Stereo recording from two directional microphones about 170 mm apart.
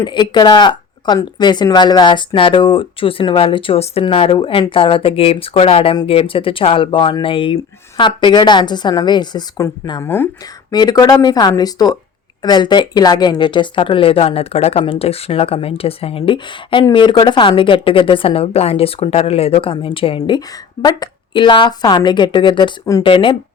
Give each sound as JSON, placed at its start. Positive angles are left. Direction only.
{"t": 0.0, "sound": "a woman's voice", "side_deg": 25}